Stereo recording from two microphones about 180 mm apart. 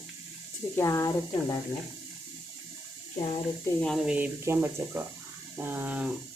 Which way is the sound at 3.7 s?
Centre (ahead or behind).